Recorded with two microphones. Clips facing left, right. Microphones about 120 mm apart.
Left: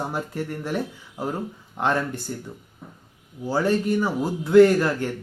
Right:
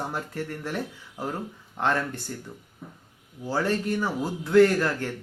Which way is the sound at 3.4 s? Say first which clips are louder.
Left 4 dB; 10° left (ahead or behind).